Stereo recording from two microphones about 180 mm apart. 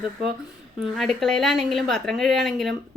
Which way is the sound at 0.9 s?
Centre (ahead or behind).